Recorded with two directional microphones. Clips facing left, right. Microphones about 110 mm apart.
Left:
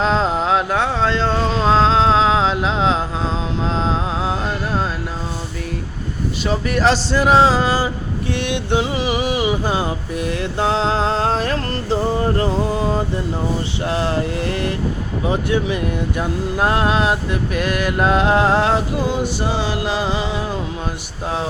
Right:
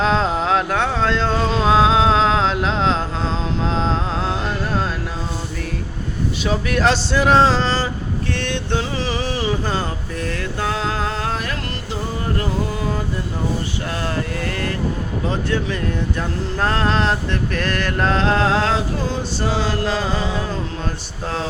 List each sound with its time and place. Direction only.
0.0 s music: centre (ahead or behind)
3.7 s mantra: centre (ahead or behind)
6.4 s a sound: centre (ahead or behind)
8.3 s music: 15° left (ahead or behind)
15.2 s speech: 15° left (ahead or behind)